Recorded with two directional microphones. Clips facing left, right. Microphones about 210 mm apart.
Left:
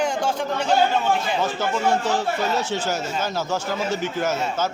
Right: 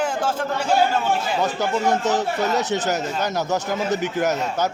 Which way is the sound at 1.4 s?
20° right (ahead or behind).